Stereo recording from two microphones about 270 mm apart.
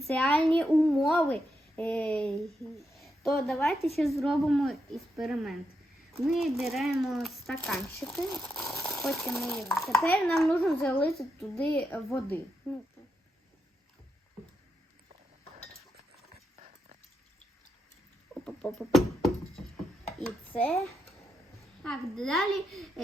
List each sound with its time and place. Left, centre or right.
0.1 s a woman's voice: centre
16.6 s pig: right
18.4 s music: centre
20.1 s speech: centre
21.8 s speech: centre